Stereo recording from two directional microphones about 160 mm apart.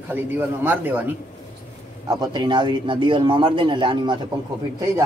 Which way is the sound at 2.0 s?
30° right (ahead or behind).